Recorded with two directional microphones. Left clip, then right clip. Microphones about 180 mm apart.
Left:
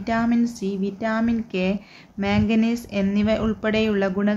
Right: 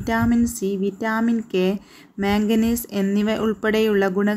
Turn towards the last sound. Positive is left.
turn(degrees=-35)  # may be behind; listen again after turning